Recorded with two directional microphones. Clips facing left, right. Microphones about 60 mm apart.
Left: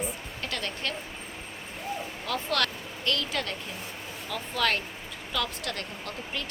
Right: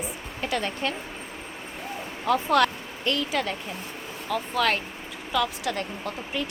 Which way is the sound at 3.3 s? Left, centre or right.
Centre.